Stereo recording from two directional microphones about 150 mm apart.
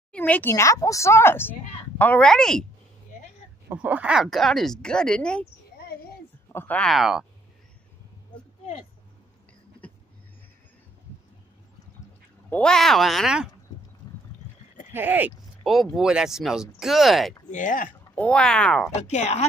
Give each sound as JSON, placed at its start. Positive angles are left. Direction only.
{"t": 0.1, "sound": "speech", "side_deg": 10}
{"t": 3.6, "sound": "speech", "side_deg": -10}
{"t": 5.4, "sound": "a sound", "side_deg": 90}
{"t": 6.5, "sound": "speech", "side_deg": 10}
{"t": 6.9, "sound": "speech", "side_deg": 0}
{"t": 12.4, "sound": "speech", "side_deg": 5}
{"t": 14.9, "sound": "speech", "side_deg": -15}
{"t": 15.6, "sound": "speech", "side_deg": 0}
{"t": 17.5, "sound": "speech", "side_deg": 60}
{"t": 18.1, "sound": "speech", "side_deg": 10}
{"t": 18.9, "sound": "speech", "side_deg": 50}